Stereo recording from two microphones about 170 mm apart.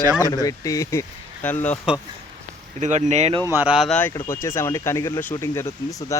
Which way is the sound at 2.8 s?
45° right (ahead or behind).